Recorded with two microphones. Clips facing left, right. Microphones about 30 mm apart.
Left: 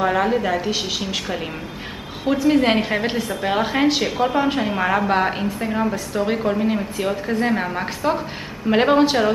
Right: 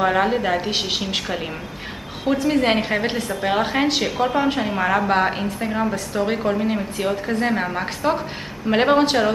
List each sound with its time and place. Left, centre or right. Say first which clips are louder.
0.0 s a woman's voice: even; centre
1.0 s a woman's voice: even; centre